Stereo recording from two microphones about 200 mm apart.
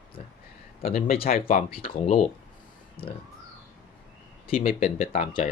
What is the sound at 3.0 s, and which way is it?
Speech, 50° left (ahead or behind).